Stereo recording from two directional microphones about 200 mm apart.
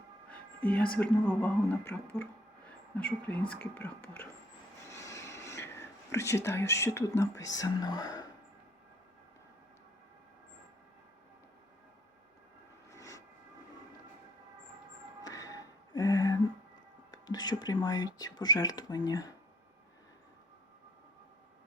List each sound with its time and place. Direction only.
0.3 s a sound: 5° left (ahead or behind)
0.9 s speech: 10° left (ahead or behind)
4.9 s a sound: 15° left (ahead or behind)
7.2 s speech: 15° left (ahead or behind)
12.9 s vehicle: 15° left (ahead or behind)
15.2 s music: 15° left (ahead or behind)
17.1 s speech: 20° left (ahead or behind)